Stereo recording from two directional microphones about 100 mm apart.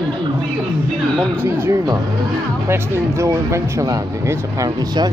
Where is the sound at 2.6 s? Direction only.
25° right (ahead or behind).